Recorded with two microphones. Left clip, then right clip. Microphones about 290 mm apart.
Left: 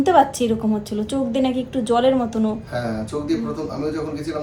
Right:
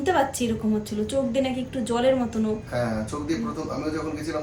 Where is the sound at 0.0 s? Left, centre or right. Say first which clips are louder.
Left 7 dB; centre.